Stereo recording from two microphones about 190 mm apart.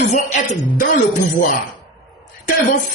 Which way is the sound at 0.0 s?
40° left (ahead or behind).